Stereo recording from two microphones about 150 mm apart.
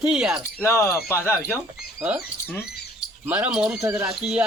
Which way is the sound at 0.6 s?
20° left (ahead or behind).